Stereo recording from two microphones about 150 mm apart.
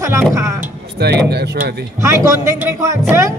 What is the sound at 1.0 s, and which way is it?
Speech, 90° right.